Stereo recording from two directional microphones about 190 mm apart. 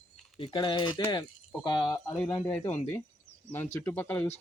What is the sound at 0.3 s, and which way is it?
Speech, 25° left (ahead or behind).